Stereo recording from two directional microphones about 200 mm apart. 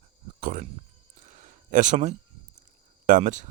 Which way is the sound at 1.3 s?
40° right (ahead or behind).